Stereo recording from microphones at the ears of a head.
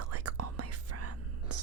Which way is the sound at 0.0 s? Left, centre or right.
Right.